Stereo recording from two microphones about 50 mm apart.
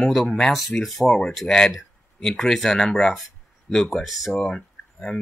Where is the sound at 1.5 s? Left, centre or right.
Centre.